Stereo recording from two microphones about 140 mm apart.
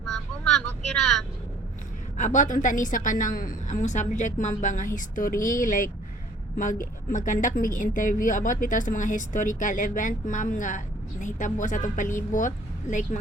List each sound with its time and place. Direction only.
0.0 s vehicle: 5° left (ahead or behind)
2.1 s a woman's voice: 60° left (ahead or behind)